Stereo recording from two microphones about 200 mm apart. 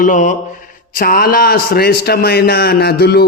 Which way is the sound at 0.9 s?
45° left (ahead or behind).